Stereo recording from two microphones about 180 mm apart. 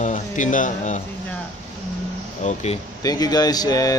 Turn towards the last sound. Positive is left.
turn(degrees=20)  # may be behind; listen again after turning